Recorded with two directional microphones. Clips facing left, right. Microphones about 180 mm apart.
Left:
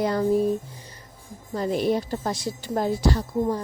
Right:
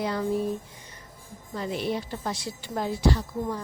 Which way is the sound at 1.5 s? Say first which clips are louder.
Left 6 dB; 40° left (ahead or behind).